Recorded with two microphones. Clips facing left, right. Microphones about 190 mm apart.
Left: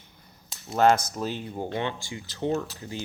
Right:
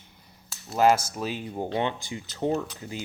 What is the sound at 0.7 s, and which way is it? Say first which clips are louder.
Speech: even; 5° right (ahead or behind).